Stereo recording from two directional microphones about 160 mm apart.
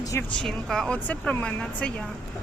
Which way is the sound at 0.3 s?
Centre (ahead or behind).